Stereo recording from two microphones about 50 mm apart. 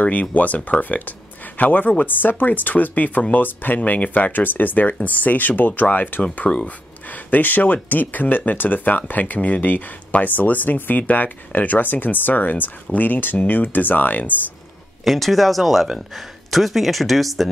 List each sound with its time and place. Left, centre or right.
0.0 s speech: left
15.0 s speech: centre